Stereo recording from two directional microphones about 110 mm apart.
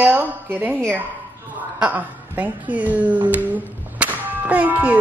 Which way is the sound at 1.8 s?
15° right (ahead or behind).